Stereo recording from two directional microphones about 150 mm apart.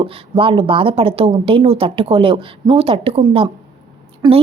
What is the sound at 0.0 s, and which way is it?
A woman's voice, 35° right (ahead or behind).